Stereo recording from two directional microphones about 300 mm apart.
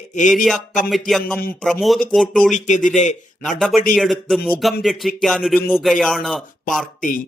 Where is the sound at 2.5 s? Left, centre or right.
Left.